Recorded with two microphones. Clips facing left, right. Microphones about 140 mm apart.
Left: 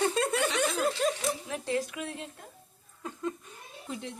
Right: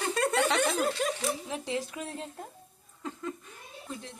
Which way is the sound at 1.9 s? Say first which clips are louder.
Even; 35° right (ahead or behind).